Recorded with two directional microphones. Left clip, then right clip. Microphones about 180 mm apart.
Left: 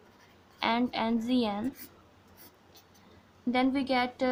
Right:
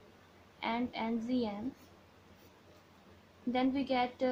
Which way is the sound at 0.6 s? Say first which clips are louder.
Left 7 dB; 35° left (ahead or behind).